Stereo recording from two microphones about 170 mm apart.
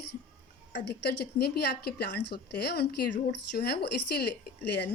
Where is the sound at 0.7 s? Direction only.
85° left.